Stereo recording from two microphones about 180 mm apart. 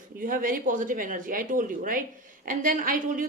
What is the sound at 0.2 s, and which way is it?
A woman's voice, 50° right (ahead or behind).